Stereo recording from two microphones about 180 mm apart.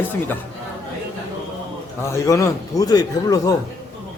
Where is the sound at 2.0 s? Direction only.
15° left (ahead or behind).